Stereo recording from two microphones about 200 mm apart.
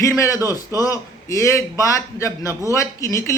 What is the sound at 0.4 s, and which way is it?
Speech, 15° left (ahead or behind).